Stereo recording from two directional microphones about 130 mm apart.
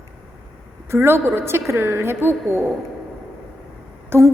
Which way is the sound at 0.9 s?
20° right (ahead or behind).